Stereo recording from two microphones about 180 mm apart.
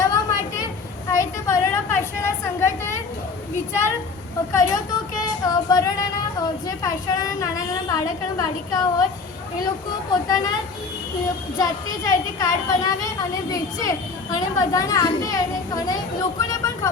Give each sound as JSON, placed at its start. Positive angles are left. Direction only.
{"t": 0.0, "sound": "a sound", "side_deg": 20}
{"t": 4.5, "sound": "a woman's voice", "side_deg": 20}
{"t": 10.1, "sound": "a woman's voice", "side_deg": 20}